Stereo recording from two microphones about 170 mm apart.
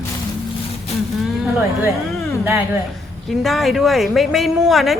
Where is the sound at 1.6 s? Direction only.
15° right (ahead or behind).